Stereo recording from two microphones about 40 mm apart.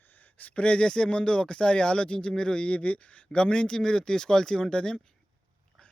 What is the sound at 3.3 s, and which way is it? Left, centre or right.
Speech, left.